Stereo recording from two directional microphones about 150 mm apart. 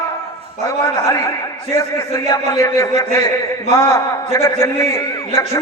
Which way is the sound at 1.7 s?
20° left (ahead or behind).